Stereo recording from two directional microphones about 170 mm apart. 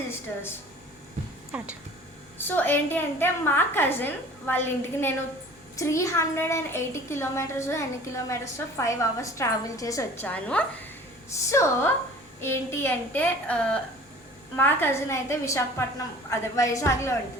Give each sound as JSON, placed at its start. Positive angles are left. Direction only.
{"t": 1.5, "sound": "speech", "side_deg": -10}
{"t": 2.6, "sound": "a woman's voice", "side_deg": 10}
{"t": 11.3, "sound": "a woman's voice", "side_deg": 15}